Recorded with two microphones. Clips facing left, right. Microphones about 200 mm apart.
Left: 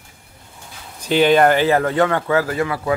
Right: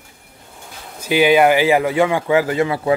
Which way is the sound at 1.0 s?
10° right (ahead or behind).